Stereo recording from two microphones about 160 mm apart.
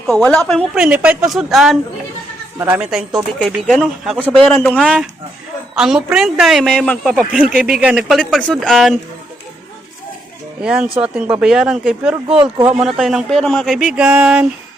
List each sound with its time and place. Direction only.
0.3 s speech: 5° left (ahead or behind)
0.8 s a woman's voice: 10° right (ahead or behind)
2.6 s a woman's voice: 10° right (ahead or behind); by 7.2 s 5° left (ahead or behind)
7.2 s speech: 5° right (ahead or behind)
10.6 s speech: 5° right (ahead or behind)
12.3 s speech: 35° right (ahead or behind)
12.8 s speech: centre (ahead or behind)